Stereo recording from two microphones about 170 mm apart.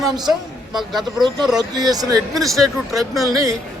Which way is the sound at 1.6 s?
25° right (ahead or behind).